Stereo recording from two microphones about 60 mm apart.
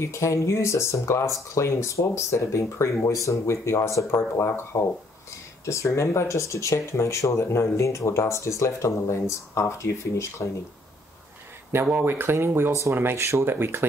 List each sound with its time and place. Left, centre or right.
0.0 s speech: left
5.7 s speech: left
11.8 s speech: right
13.2 s speech: right